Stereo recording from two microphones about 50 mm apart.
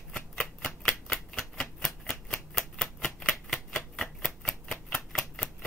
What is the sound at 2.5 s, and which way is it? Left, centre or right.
Typewriter, centre.